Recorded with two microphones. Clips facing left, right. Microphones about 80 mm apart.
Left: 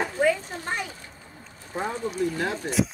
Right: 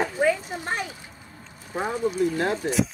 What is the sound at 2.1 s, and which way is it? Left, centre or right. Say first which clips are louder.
Speech: right 3 dB; centre.